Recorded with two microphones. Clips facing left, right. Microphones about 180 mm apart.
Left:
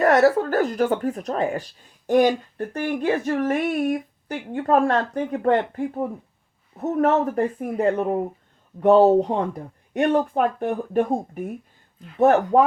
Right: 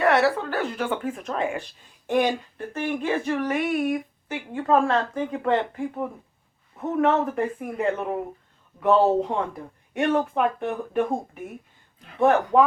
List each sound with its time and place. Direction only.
0.0 s speech: 40° left (ahead or behind)
12.2 s speech: 40° left (ahead or behind)